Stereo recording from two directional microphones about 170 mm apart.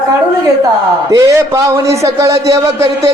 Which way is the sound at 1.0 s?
20° right (ahead or behind).